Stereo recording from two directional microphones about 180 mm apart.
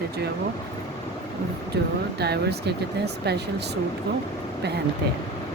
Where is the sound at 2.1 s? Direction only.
65° right (ahead or behind).